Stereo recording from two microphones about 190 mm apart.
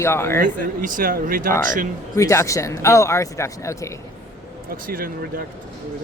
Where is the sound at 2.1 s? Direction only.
15° left (ahead or behind).